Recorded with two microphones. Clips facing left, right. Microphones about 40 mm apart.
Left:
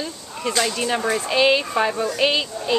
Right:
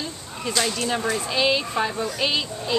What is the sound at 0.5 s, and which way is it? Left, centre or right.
Speech, left.